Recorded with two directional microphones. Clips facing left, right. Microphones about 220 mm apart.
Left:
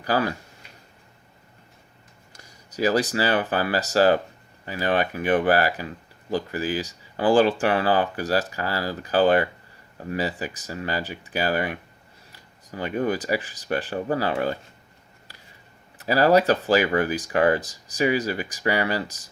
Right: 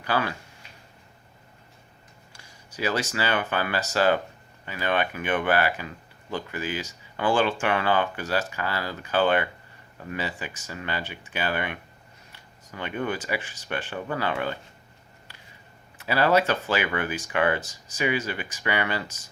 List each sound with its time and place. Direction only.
0.0 s speech: 40° left (ahead or behind)
2.7 s speech: 35° left (ahead or behind)
15.3 s a sound: 35° left (ahead or behind)
16.0 s speech: 40° left (ahead or behind)